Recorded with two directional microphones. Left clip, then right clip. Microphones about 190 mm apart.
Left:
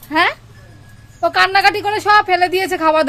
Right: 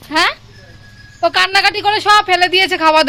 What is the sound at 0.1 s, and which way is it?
Speech, 15° left (ahead or behind).